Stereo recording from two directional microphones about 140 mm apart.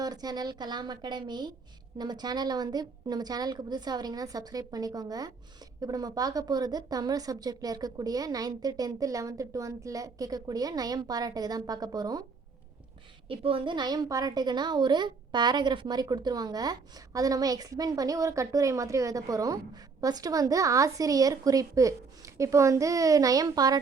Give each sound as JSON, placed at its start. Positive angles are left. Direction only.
{"t": 0.0, "sound": "a woman's voice", "side_deg": -30}
{"t": 13.2, "sound": "speech", "side_deg": -40}